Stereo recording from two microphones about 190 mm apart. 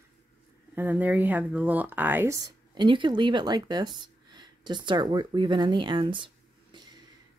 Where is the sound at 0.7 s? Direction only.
10° right (ahead or behind).